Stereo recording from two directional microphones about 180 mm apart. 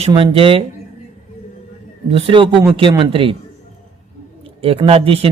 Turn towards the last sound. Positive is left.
turn(degrees=-30)  # may be behind; listen again after turning